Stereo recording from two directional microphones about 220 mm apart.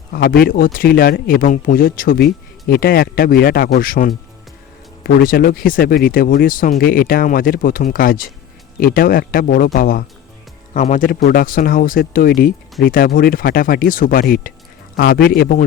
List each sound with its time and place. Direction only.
0.1 s speech: 45° left (ahead or behind)